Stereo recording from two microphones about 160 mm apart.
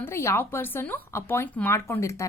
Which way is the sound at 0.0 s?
15° left (ahead or behind).